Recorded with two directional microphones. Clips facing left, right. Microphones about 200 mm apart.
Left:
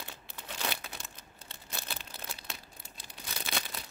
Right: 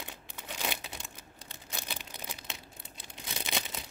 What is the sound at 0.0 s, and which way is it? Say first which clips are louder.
Crumpling: right 1 dB; 15° right (ahead or behind).